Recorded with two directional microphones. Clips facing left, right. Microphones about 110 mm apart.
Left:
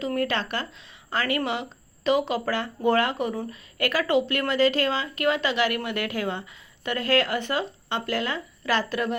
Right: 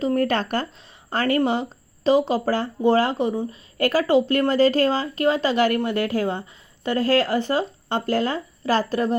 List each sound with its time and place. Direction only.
0.0 s speech: 40° right (ahead or behind)